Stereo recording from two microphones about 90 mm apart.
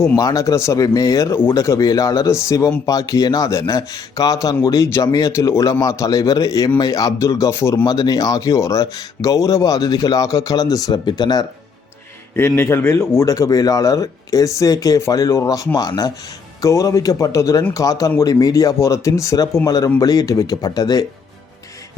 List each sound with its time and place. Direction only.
0.2 s speech: 40° left (ahead or behind)
7.9 s speech: 45° left (ahead or behind)
12.4 s speech: 30° left (ahead or behind)
13.2 s speech: 40° left (ahead or behind)